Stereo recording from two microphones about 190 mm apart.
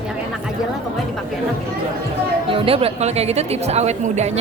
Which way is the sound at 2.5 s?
30° right (ahead or behind).